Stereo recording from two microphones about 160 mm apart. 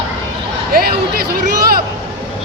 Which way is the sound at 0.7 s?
70° right (ahead or behind).